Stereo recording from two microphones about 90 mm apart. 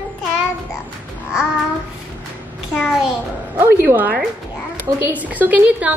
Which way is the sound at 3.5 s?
25° right (ahead or behind).